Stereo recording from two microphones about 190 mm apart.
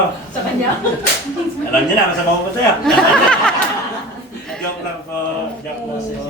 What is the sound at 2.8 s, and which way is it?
Speech, 5° left (ahead or behind).